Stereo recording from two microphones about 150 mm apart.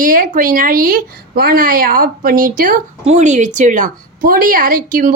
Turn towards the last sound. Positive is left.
turn(degrees=-65)  # may be behind; listen again after turning